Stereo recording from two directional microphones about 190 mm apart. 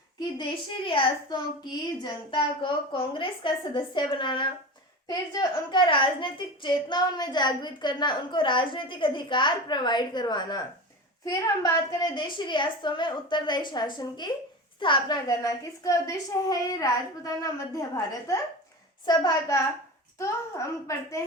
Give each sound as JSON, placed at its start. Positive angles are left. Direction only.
{"t": 0.9, "sound": "a woman's voice", "side_deg": 25}